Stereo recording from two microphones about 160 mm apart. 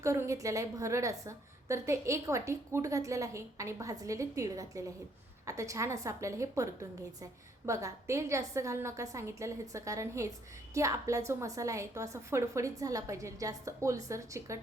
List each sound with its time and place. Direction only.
0.0 s a woman's voice: 20° right (ahead or behind)